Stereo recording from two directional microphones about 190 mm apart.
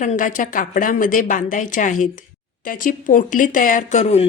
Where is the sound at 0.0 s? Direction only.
40° left (ahead or behind).